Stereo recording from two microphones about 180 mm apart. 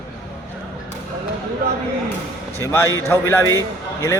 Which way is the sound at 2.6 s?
15° left (ahead or behind).